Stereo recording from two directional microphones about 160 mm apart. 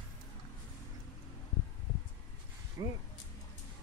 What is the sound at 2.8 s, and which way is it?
Speech, 25° right (ahead or behind).